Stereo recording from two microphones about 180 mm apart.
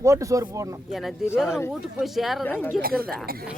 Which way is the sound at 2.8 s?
55° right (ahead or behind).